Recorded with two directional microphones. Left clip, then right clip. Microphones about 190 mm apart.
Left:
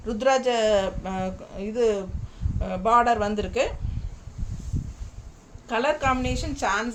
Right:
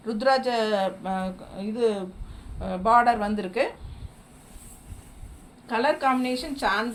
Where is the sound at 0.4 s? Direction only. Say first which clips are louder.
Left 3 dB; 30° left (ahead or behind).